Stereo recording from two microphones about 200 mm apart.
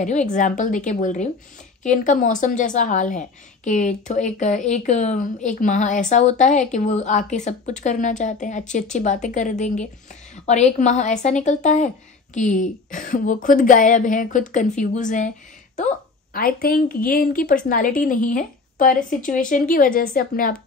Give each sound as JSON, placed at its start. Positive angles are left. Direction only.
{"t": 0.0, "sound": "a woman's voice", "side_deg": 35}